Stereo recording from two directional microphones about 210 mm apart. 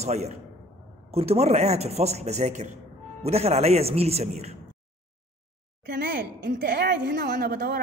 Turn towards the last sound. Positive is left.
turn(degrees=-45)  # may be behind; listen again after turning